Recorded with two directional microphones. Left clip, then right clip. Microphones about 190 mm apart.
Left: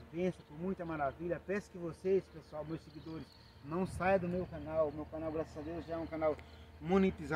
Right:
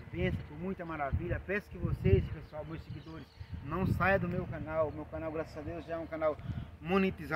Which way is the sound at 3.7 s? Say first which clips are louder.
Right 3 dB; 35° left (ahead or behind).